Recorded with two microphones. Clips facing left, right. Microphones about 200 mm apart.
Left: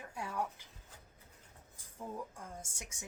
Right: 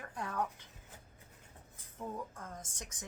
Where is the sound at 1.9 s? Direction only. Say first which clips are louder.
Right 1 dB; 10° left (ahead or behind).